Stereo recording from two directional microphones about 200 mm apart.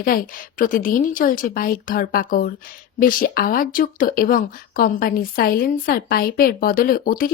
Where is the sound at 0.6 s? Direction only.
40° left (ahead or behind).